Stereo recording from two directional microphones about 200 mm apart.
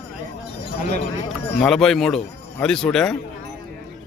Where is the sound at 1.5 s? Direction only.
Centre (ahead or behind).